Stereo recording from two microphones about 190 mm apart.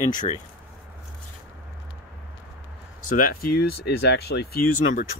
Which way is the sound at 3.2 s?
55° left (ahead or behind).